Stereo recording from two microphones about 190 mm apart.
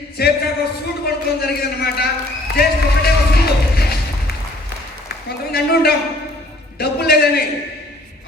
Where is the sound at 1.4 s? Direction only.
55° left (ahead or behind).